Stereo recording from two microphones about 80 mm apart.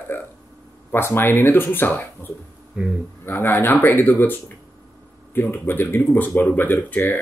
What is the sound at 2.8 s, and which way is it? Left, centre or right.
Speech, centre.